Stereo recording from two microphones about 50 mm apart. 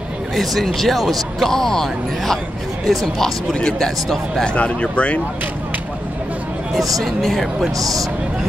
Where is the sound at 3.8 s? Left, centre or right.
Centre.